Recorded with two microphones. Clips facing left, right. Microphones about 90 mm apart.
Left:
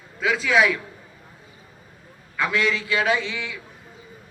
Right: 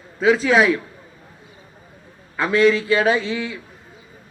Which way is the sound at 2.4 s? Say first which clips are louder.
Right 7 dB; 35° right (ahead or behind).